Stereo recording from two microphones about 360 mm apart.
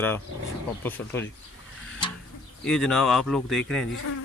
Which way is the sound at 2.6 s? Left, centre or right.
Centre.